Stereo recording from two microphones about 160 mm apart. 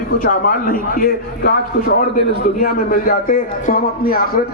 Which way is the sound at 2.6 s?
60° left (ahead or behind).